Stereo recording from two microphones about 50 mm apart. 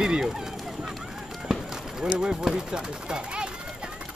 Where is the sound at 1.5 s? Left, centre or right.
Centre.